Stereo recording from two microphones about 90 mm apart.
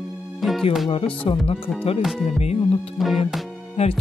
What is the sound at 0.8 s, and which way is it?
Speech, 90° left.